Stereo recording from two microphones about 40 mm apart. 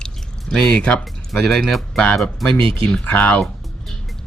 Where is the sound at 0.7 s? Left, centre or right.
Left.